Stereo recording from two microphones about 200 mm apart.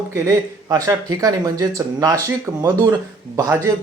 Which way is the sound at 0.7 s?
15° right (ahead or behind).